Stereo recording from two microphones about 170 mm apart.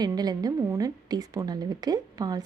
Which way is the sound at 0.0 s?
25° right (ahead or behind).